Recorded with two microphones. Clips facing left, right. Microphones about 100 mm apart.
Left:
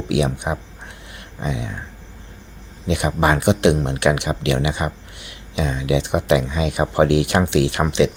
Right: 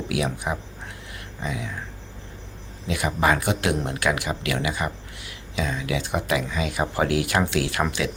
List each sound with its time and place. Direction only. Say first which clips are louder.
0.1 s speech: left 6 dB; 25° left (ahead or behind)
2.8 s speech: left 4 dB; 25° left (ahead or behind)